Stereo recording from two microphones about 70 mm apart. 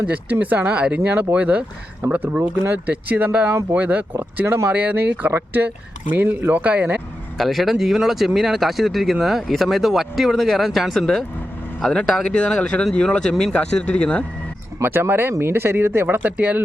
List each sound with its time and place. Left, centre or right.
0.0 s speech: right
4.7 s speech: right
7.3 s speech: centre
14.8 s speech: right